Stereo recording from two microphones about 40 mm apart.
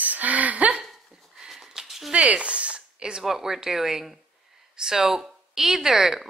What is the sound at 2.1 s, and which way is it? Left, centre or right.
Speech, right.